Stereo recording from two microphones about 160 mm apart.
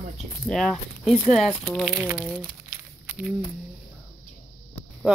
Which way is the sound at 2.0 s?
15° right (ahead or behind).